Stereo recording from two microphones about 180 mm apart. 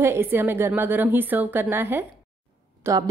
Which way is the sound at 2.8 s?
20° right (ahead or behind).